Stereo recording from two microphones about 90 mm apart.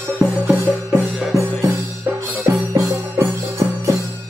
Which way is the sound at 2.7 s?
35° right (ahead or behind).